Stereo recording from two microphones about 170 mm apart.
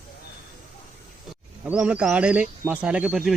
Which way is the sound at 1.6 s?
5° right (ahead or behind).